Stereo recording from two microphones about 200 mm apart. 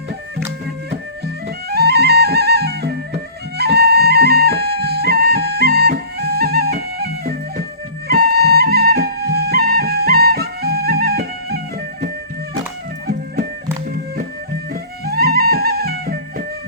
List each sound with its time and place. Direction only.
1.5 s music: 55° right (ahead or behind)
14.7 s music: 50° right (ahead or behind)